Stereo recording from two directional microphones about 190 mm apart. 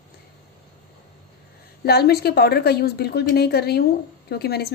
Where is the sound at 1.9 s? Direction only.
55° left (ahead or behind).